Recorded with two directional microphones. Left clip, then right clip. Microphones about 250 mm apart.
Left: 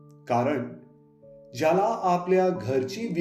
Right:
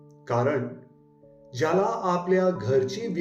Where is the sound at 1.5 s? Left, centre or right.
Left.